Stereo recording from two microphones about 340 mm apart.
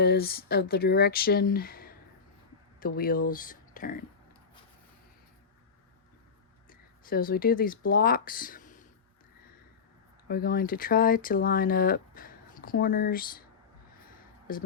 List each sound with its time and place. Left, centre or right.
0.0 s speech: left
6.7 s speech: left
10.2 s speech: left
14.5 s speech: left